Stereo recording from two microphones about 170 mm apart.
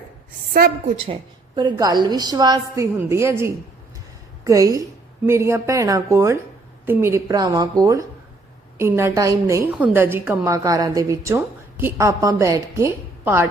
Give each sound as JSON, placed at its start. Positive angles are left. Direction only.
{"t": 0.5, "sound": "a woman's voice", "side_deg": -60}
{"t": 0.9, "sound": "a woman's voice", "side_deg": -35}